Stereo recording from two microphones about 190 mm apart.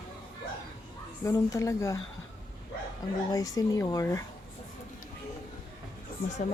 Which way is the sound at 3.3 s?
20° left (ahead or behind).